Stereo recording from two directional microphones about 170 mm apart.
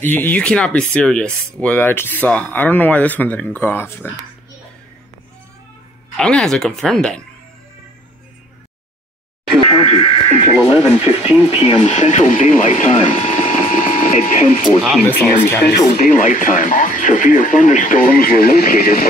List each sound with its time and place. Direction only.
0.0 s speech: 10° left (ahead or behind)
6.1 s speech: 5° left (ahead or behind)
9.7 s music: 25° left (ahead or behind)
11.1 s speech: 10° right (ahead or behind)
11.6 s speech: 35° left (ahead or behind)
15.4 s speech: 15° left (ahead or behind)
15.9 s speech: 50° left (ahead or behind)